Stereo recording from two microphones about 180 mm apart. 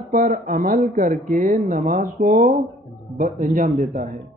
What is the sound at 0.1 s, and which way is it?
Speech, 50° right (ahead or behind).